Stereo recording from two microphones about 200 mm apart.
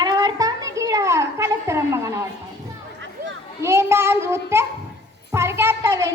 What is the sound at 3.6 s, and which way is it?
Child singing, 15° right (ahead or behind).